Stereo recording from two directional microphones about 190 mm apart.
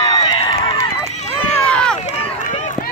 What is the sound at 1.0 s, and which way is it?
Run, 35° left (ahead or behind).